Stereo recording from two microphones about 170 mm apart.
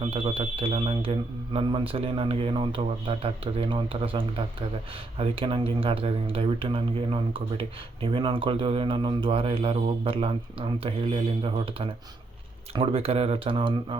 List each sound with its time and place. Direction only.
0.0 s speech: 30° right (ahead or behind)